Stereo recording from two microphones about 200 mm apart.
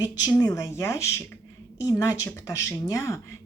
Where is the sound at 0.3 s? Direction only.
15° left (ahead or behind).